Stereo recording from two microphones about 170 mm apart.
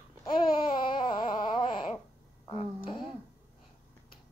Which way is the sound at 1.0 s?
30° left (ahead or behind).